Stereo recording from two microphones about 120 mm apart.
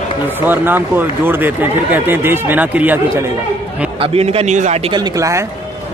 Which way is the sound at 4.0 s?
55° right (ahead or behind).